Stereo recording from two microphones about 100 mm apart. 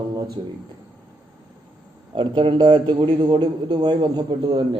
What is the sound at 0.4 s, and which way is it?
Speech, 50° right (ahead or behind).